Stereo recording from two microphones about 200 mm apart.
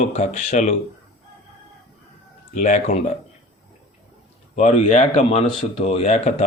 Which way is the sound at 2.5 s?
40° left (ahead or behind).